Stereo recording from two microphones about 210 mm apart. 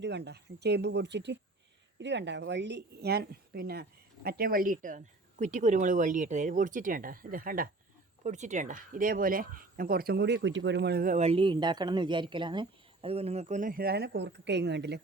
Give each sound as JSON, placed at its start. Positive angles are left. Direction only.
{"t": 0.0, "sound": "speech", "side_deg": -55}